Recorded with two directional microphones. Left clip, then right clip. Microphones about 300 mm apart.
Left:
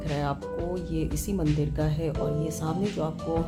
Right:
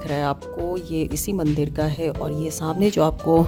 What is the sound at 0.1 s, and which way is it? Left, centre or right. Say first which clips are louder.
Speech: right 6 dB; right.